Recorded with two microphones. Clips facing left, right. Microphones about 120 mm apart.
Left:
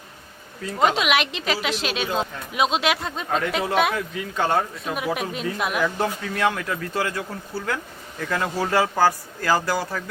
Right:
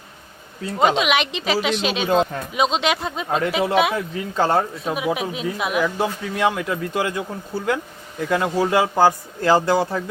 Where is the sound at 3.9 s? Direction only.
30° right (ahead or behind).